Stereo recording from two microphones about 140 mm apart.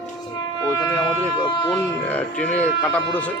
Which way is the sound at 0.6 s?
25° left (ahead or behind).